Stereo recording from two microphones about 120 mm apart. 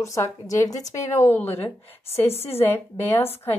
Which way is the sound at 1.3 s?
15° left (ahead or behind).